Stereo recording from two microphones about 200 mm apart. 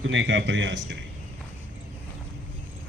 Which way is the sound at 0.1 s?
70° right (ahead or behind).